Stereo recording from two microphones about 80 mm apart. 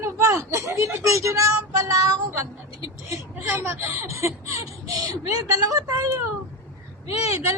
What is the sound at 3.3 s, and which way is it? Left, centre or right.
Speech, right.